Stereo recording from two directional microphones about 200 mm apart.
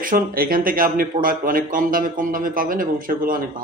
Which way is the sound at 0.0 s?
45° right (ahead or behind).